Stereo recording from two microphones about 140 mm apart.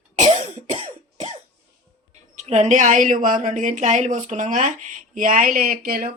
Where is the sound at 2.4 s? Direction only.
55° right (ahead or behind).